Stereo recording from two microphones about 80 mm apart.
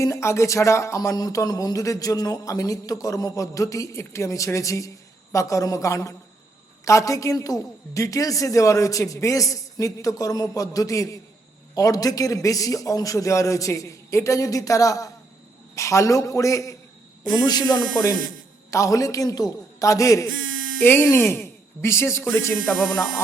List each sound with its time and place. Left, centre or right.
0.0 s speech: left
1.1 s a man's voice: left
17.4 s speech: left
18.7 s a man's voice: left
20.7 s speech: left